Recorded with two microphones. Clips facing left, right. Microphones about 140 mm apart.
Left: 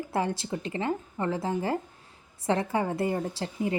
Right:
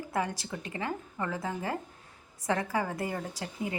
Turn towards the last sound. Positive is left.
turn(degrees=30)  # may be behind; listen again after turning